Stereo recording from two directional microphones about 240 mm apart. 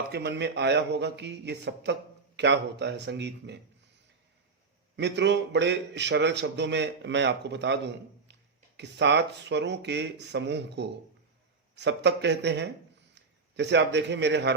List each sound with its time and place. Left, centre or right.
0.1 s a man's voice: right